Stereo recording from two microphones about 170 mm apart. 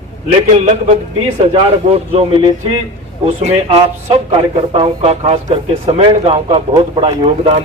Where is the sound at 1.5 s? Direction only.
35° right (ahead or behind).